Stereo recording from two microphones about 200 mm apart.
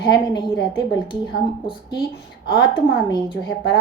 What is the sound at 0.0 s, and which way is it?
Speech, 55° left (ahead or behind).